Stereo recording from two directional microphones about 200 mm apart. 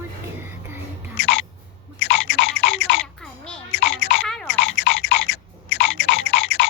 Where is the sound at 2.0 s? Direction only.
70° left (ahead or behind).